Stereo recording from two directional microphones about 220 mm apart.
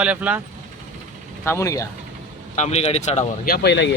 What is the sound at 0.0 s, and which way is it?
Speech, 5° right (ahead or behind).